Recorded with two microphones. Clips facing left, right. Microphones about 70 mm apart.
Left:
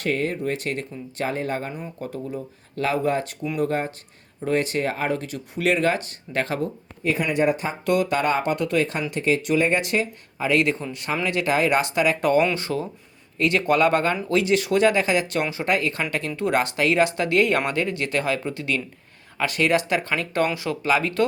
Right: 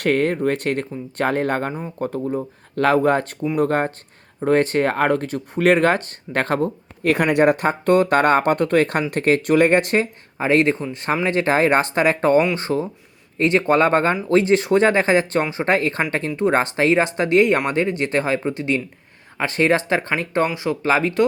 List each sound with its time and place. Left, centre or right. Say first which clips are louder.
0.0 s speech: right 6 dB; right
7.0 s speech: right 6 dB; right